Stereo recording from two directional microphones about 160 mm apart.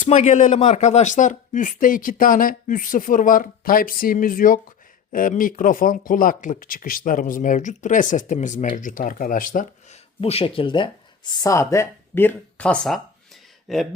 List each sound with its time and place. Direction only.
0.0 s speech: 50° left (ahead or behind)
10.2 s speech: 35° left (ahead or behind); by 13.8 s centre (ahead or behind)